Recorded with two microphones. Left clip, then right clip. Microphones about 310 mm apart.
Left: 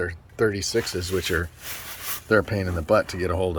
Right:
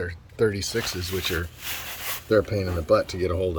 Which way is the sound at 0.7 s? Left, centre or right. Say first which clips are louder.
Left 3 dB; centre.